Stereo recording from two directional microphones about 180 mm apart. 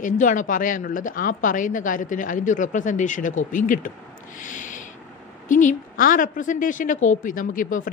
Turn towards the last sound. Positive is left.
turn(degrees=50)  # may be behind; listen again after turning